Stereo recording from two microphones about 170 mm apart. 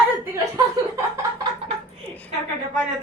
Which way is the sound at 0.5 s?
20° right (ahead or behind).